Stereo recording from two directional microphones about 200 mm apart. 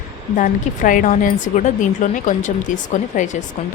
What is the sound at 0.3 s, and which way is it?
A woman's voice, 40° left (ahead or behind).